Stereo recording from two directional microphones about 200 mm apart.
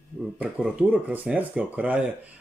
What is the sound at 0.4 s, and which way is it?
Speech, 5° right (ahead or behind).